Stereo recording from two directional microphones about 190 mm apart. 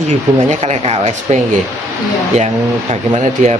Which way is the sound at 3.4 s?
40° right (ahead or behind).